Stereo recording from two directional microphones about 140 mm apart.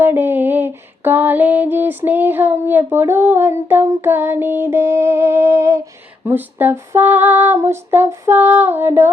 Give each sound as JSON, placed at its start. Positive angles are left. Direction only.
{"t": 0.0, "sound": "female singing", "side_deg": -15}